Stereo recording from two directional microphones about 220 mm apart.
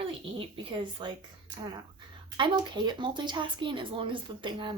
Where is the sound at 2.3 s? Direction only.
20° right (ahead or behind).